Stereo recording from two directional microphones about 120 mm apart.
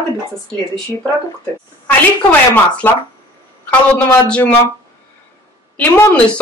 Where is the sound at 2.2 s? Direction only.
15° left (ahead or behind).